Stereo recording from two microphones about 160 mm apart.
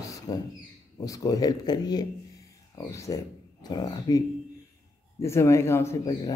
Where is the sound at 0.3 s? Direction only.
25° left (ahead or behind).